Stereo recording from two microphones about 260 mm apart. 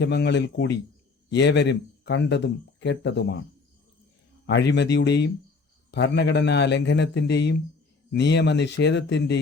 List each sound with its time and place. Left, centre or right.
0.0 s speech: left
4.4 s speech: left